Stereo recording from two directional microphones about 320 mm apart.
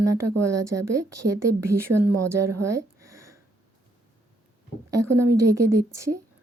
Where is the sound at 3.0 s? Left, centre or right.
Right.